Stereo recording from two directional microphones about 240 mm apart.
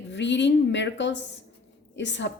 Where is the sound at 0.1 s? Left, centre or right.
Left.